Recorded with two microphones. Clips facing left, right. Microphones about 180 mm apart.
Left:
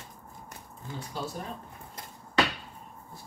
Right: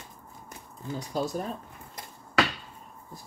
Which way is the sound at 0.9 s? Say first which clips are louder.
Right 6 dB; 40° right (ahead or behind).